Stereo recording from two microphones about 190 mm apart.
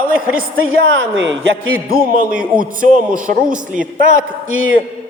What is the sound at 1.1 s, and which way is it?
Speech, 75° right (ahead or behind).